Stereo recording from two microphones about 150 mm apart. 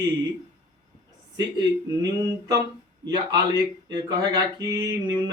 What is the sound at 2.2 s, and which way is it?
Speech, 25° right (ahead or behind).